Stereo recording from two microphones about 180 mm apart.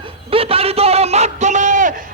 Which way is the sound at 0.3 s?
30° right (ahead or behind).